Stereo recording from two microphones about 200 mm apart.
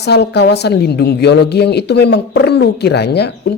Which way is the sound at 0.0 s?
55° left (ahead or behind).